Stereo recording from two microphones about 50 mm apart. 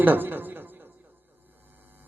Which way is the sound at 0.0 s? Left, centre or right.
Right.